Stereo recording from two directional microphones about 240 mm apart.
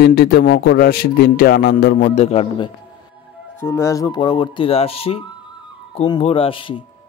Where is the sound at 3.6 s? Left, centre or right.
Centre.